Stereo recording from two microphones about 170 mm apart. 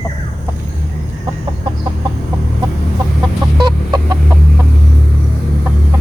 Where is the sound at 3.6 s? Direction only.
25° right (ahead or behind).